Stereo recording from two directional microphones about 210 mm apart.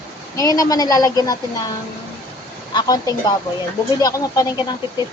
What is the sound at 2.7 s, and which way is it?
Speech, 20° left (ahead or behind).